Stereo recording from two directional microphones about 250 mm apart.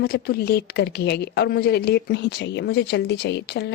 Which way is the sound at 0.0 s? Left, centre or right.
Left.